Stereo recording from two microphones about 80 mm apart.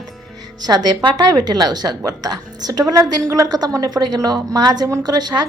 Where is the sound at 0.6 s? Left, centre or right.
Right.